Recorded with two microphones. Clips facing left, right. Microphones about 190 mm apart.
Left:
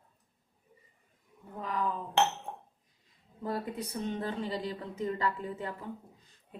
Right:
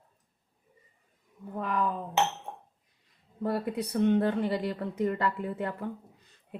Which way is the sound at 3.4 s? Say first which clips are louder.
Right 5 dB; 65° right (ahead or behind).